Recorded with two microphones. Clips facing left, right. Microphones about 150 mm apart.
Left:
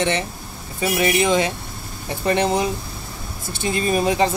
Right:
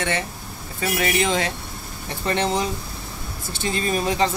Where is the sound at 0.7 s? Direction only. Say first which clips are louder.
Left 3 dB; 20° left (ahead or behind).